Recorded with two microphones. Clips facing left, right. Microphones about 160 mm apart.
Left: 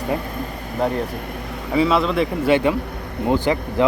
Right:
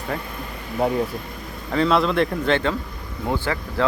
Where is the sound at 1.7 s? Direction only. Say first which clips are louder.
Left 1 dB; 5° left (ahead or behind).